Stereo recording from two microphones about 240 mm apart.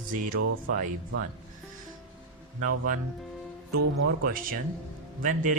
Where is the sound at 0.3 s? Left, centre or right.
Right.